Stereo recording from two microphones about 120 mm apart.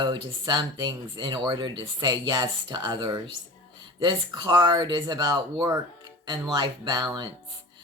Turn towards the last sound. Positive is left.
turn(degrees=-35)  # may be behind; listen again after turning